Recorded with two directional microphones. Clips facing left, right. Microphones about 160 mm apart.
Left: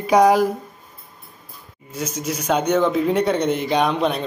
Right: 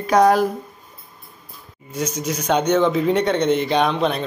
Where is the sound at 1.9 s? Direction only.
5° left (ahead or behind).